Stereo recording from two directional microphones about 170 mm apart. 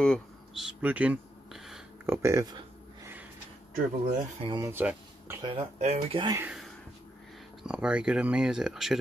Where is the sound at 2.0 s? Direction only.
20° right (ahead or behind).